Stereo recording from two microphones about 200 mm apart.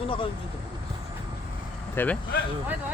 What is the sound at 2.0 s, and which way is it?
Speech, 10° left (ahead or behind).